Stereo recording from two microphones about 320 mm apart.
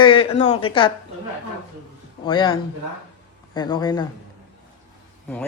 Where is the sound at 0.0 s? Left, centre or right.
Centre.